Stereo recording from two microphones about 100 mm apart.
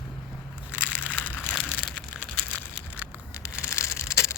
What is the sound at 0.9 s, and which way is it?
Crushing, 15° left (ahead or behind).